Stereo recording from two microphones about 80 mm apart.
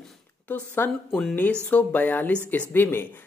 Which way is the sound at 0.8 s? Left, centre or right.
Left.